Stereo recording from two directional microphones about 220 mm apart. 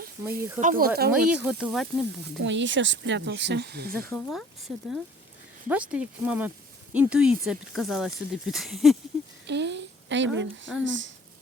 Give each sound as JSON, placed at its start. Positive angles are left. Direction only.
{"t": 0.2, "sound": "speech", "side_deg": -10}
{"t": 0.6, "sound": "speech", "side_deg": -40}
{"t": 1.3, "sound": "speech", "side_deg": -5}
{"t": 2.4, "sound": "speech", "side_deg": -55}
{"t": 4.1, "sound": "speech", "side_deg": 0}
{"t": 5.6, "sound": "speech", "side_deg": -5}
{"t": 9.5, "sound": "a woman's voice", "side_deg": -50}